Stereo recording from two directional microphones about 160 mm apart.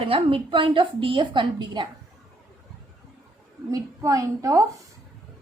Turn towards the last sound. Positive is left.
turn(degrees=-20)  # may be behind; listen again after turning